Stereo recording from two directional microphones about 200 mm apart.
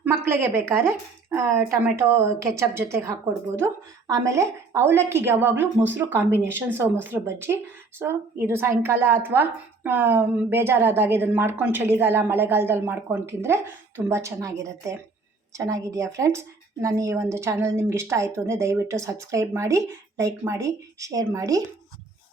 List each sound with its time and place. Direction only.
0.0 s a woman's voice: 10° right (ahead or behind)